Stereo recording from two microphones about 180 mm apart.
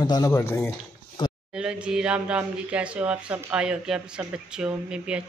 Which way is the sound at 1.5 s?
5° right (ahead or behind).